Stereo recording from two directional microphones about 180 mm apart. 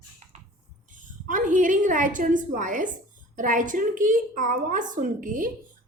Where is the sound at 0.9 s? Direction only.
45° right (ahead or behind).